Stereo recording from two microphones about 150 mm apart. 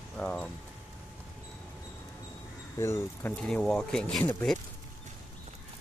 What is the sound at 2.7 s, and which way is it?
Speech, 15° left (ahead or behind).